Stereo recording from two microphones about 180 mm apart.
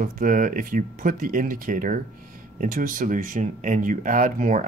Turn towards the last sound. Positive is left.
turn(degrees=-45)  # may be behind; listen again after turning